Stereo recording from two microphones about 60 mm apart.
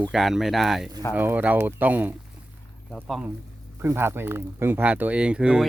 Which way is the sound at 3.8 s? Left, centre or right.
Right.